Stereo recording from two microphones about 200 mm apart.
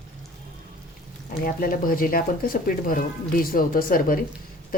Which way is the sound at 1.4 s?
45° left (ahead or behind).